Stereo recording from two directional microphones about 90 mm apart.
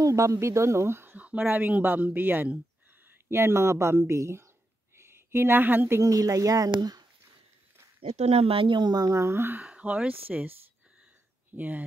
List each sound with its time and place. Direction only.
0.0 s a woman's voice: 35° right (ahead or behind)
8.5 s speech: 70° right (ahead or behind); by 9.1 s 50° right (ahead or behind)
9.1 s speech: 30° right (ahead or behind)
11.5 s speech: 20° right (ahead or behind)